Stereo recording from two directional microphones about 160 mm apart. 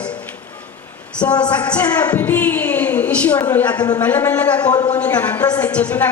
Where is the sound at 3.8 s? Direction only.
25° left (ahead or behind).